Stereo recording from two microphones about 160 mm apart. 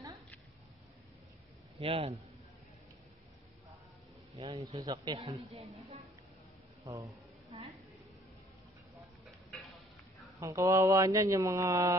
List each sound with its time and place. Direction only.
1.8 s speech: 35° right (ahead or behind)
4.6 s speech: 20° right (ahead or behind)
5.5 s speech: 40° right (ahead or behind)
6.8 s a man's voice: 20° right (ahead or behind)
10.4 s speech: 20° right (ahead or behind)